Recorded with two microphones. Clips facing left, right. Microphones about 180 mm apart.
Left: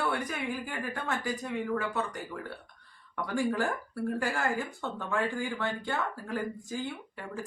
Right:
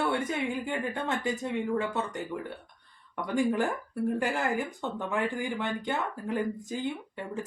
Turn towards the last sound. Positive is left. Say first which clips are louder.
# right 3 dB
turn(degrees=-20)  # may be behind; listen again after turning